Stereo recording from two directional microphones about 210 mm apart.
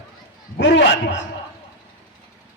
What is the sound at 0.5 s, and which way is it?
Speech, 55° left (ahead or behind).